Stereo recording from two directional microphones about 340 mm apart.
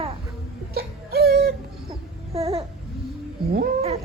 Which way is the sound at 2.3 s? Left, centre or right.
Centre.